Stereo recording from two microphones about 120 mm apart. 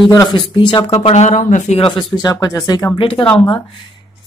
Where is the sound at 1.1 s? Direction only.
90° left.